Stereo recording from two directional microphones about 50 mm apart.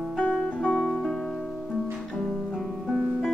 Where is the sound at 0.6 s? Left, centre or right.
Centre.